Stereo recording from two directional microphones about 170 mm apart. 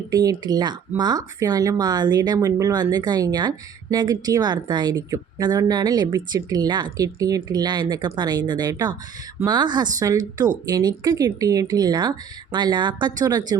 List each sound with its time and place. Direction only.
0.1 s speech: 25° right (ahead or behind)